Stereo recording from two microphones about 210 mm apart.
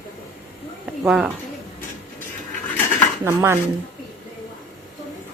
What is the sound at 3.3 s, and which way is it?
Speech, 15° right (ahead or behind).